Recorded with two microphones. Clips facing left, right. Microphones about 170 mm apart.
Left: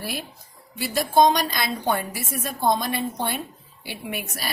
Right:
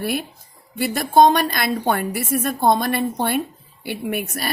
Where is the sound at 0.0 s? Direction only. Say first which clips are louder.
Right 8 dB; 55° right (ahead or behind).